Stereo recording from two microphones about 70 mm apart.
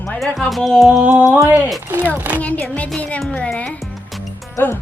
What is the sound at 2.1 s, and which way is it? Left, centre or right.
Speech, right.